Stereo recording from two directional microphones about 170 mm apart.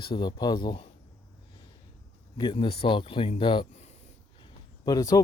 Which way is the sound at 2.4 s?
30° left (ahead or behind).